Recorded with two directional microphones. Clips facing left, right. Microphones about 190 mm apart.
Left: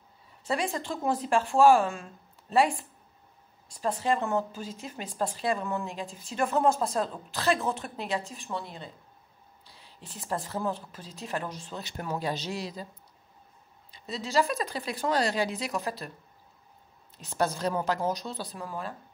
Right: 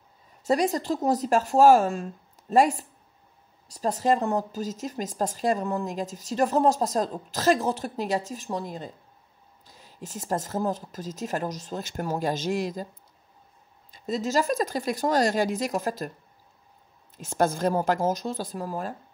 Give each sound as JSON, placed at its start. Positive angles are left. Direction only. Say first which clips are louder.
{"t": 0.4, "sound": "speech", "louder": "right 7 dB", "side_deg": -40}
{"t": 13.9, "sound": "speech", "louder": "right 3 dB", "side_deg": -45}
{"t": 17.2, "sound": "speech", "louder": "right 5 dB", "side_deg": -45}